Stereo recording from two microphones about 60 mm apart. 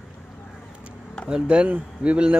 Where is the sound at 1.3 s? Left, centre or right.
Centre.